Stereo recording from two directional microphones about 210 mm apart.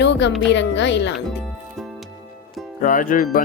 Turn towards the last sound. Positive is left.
turn(degrees=40)  # may be behind; listen again after turning